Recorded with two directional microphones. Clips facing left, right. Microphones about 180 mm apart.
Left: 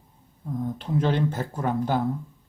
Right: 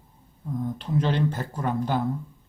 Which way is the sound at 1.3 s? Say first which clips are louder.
Left 1 dB; 15° left (ahead or behind).